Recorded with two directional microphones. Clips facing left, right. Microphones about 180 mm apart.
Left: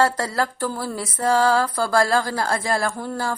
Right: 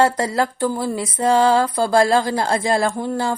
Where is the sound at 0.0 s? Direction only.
20° right (ahead or behind).